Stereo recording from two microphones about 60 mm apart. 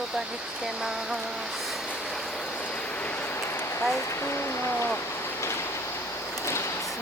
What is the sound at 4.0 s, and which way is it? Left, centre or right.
Speech, left.